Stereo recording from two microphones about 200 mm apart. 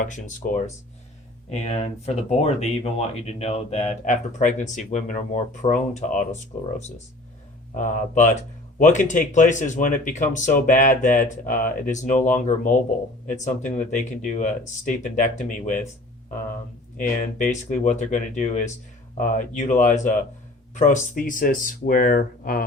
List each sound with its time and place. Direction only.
0.0 s speech: 40° left (ahead or behind)
17.0 s speech: 40° left (ahead or behind)